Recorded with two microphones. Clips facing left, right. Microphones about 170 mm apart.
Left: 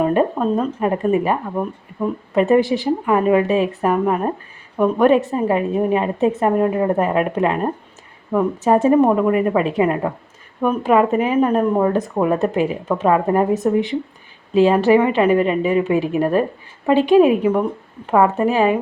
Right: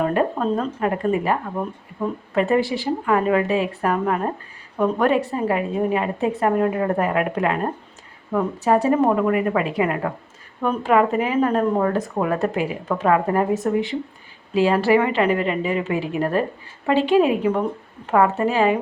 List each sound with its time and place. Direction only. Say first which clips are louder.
0.0 s speech: left 4 dB; 20° left (ahead or behind)
0.3 s a woman's voice: left 3 dB; 10° left (ahead or behind); by 10.1 s 25° left (ahead or behind)
10.6 s a woman's voice: left 3 dB; 15° left (ahead or behind)